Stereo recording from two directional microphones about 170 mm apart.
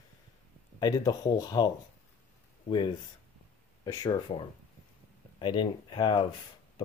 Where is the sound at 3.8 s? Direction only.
20° left (ahead or behind).